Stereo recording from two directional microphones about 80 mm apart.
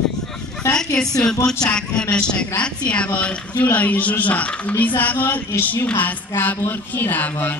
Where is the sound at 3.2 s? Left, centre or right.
Centre.